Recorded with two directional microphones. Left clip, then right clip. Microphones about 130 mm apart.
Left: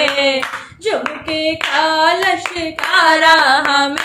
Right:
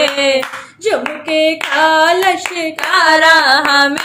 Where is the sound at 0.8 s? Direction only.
45° right (ahead or behind).